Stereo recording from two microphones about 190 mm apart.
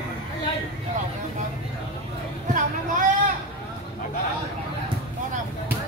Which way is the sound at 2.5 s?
45° right (ahead or behind).